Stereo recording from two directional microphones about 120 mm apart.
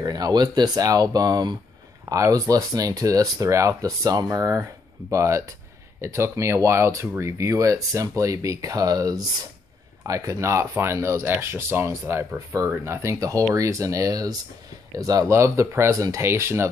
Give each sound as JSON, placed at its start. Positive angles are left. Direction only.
{"t": 0.0, "sound": "speech", "side_deg": -35}